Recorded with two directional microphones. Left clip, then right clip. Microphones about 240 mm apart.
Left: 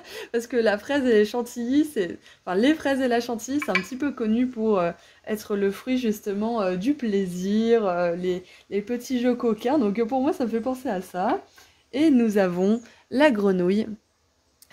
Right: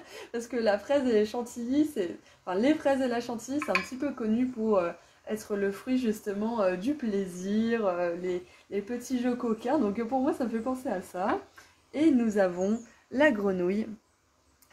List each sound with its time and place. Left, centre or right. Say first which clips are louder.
0.1 s a woman's voice: left 8 dB; left